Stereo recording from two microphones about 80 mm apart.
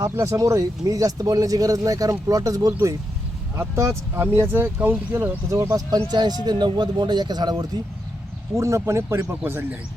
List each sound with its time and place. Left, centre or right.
0.0 s speech: right
3.5 s speech: right
5.5 s speech: right
6.1 s speech: right
8.5 s speech: right